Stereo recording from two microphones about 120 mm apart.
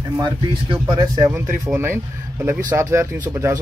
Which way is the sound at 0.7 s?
50° right (ahead or behind).